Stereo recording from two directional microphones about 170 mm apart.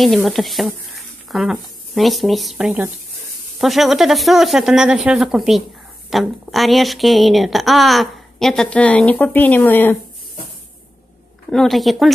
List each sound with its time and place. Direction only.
0.0 s speech: centre (ahead or behind)
11.5 s speech: centre (ahead or behind)